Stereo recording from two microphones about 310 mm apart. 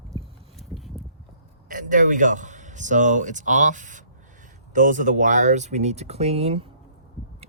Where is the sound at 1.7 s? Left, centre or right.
Right.